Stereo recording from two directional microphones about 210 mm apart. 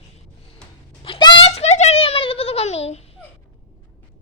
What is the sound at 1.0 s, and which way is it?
A child's voice, 25° left (ahead or behind).